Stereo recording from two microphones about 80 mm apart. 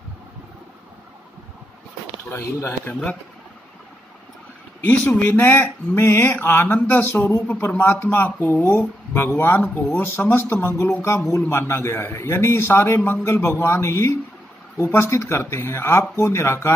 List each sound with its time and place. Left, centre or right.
2.2 s a man's voice: left
2.9 s speech: centre
4.8 s a man's voice: centre